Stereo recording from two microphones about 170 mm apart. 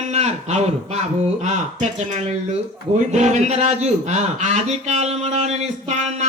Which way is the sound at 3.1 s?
40° right (ahead or behind).